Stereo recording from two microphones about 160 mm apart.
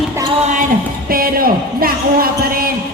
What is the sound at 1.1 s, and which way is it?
Speech, 65° right (ahead or behind).